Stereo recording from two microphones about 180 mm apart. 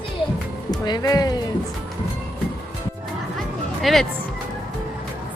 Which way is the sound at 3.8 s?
Centre (ahead or behind).